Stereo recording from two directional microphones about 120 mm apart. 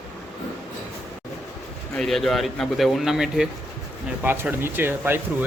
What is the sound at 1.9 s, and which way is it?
Speech, 5° left (ahead or behind).